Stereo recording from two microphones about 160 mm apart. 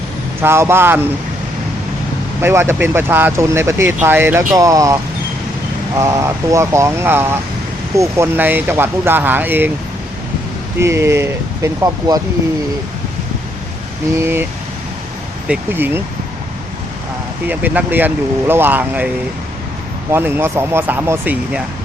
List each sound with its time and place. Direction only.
0.4 s speech: 15° right (ahead or behind)
2.4 s speech: 15° right (ahead or behind)
6.0 s speech: 15° right (ahead or behind)
10.8 s speech: 15° right (ahead or behind)
14.2 s speech: 15° right (ahead or behind)
15.4 s speech: 10° right (ahead or behind)
17.5 s speech: 10° right (ahead or behind)